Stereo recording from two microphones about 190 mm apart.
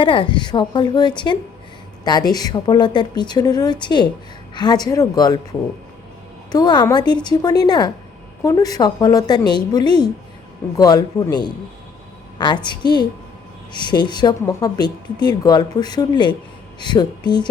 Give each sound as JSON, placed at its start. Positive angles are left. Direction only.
{"t": 0.0, "sound": "speech", "side_deg": 25}
{"t": 12.6, "sound": "speech", "side_deg": 20}